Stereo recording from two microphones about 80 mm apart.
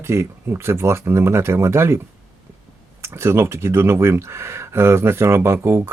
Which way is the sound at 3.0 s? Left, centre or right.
Right.